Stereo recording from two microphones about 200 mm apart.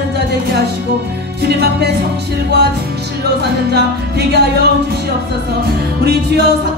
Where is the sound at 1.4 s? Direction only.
55° right (ahead or behind).